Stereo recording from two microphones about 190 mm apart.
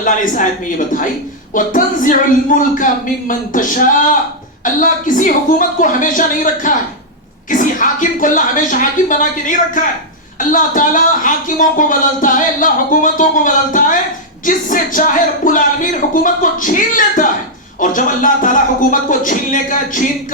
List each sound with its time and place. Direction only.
1.5 s speech: 45° left (ahead or behind)